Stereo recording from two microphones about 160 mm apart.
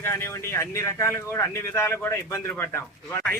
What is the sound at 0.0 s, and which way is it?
A man's voice, 15° left (ahead or behind).